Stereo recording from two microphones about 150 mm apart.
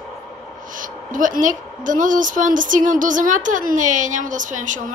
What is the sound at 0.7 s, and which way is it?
A woman's voice, 60° right (ahead or behind).